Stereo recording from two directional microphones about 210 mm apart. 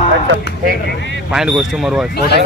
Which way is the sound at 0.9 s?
60° left (ahead or behind).